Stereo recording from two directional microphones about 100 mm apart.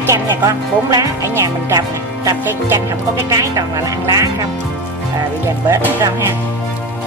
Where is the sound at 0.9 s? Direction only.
30° right (ahead or behind).